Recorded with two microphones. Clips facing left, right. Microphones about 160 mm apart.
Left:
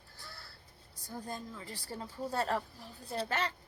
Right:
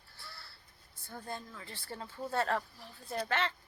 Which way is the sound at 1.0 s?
40° left (ahead or behind).